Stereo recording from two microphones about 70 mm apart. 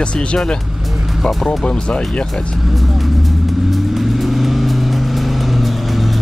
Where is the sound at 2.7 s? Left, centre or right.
Centre.